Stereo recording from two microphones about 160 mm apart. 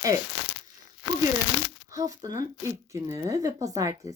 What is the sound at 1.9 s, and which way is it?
Speech, 20° right (ahead or behind).